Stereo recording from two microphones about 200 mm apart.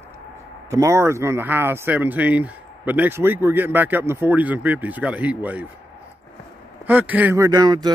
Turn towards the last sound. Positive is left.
turn(degrees=-20)  # may be behind; listen again after turning